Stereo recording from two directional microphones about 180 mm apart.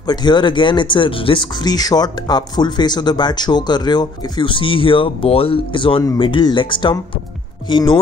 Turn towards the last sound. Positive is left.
turn(degrees=25)  # may be behind; listen again after turning